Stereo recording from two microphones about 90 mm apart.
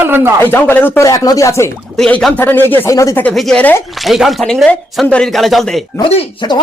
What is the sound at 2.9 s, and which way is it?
Speech, 35° left (ahead or behind).